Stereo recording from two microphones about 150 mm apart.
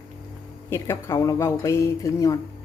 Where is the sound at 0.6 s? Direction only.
20° left (ahead or behind).